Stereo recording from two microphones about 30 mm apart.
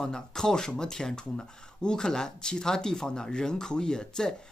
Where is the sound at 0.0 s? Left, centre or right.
Centre.